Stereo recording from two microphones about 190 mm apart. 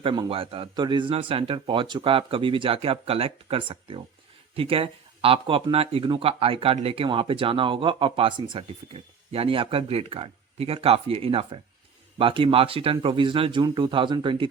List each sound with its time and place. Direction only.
0.0 s speech: 25° right (ahead or behind)